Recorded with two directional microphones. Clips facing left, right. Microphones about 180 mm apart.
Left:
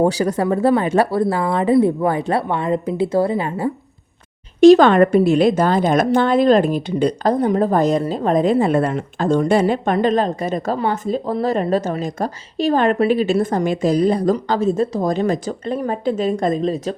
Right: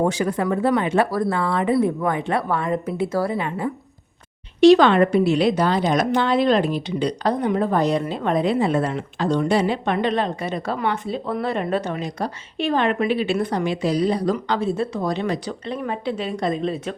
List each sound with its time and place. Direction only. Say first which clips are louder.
0.0 s speech: left 4 dB; 35° left (ahead or behind)
4.6 s a woman's voice: left 4 dB; 45° left (ahead or behind)